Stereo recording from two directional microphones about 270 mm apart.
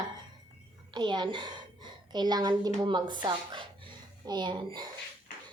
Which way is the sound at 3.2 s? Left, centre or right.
Centre.